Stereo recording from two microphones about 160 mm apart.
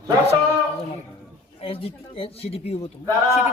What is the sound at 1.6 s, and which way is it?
Speech, 35° left (ahead or behind).